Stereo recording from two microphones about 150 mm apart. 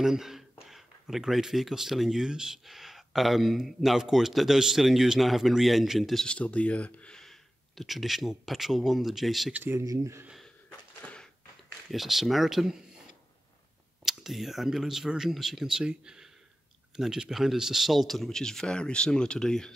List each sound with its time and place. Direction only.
0.0 s speech: 5° right (ahead or behind)
9.5 s speech: 15° right (ahead or behind)
10.2 s a sound: centre (ahead or behind)
11.9 s speech: centre (ahead or behind)
14.0 s speech: centre (ahead or behind)